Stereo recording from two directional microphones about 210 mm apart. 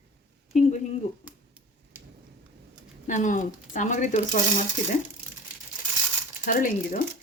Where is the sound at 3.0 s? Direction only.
35° left (ahead or behind).